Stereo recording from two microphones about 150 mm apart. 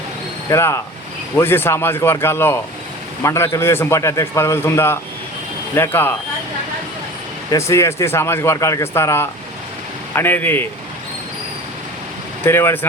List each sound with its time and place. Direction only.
0.4 s a man's voice: 20° left (ahead or behind)
7.5 s a man's voice: 20° left (ahead or behind)
12.5 s a man's voice: 15° left (ahead or behind)